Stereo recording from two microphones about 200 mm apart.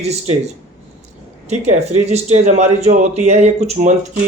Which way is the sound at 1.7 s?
35° right (ahead or behind).